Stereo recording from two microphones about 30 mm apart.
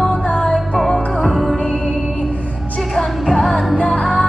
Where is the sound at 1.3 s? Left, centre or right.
Centre.